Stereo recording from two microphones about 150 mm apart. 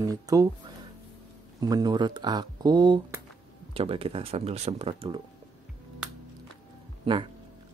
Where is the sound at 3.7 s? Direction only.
40° right (ahead or behind).